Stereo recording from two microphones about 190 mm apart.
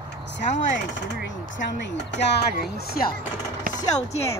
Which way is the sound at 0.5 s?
70° left (ahead or behind).